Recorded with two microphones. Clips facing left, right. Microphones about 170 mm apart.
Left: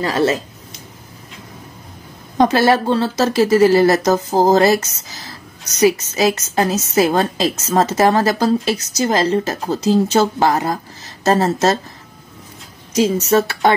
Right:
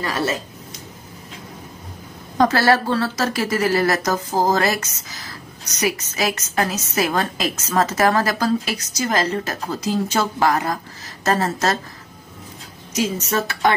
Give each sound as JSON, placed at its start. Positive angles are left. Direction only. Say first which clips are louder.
{"t": 0.0, "sound": "a woman's voice", "louder": "left 6 dB", "side_deg": 25}
{"t": 2.3, "sound": "a woman's voice", "louder": "left 3 dB", "side_deg": 20}
{"t": 12.9, "sound": "a woman's voice", "louder": "left 7 dB", "side_deg": 30}